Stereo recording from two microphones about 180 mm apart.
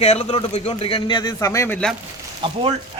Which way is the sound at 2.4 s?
30° right (ahead or behind).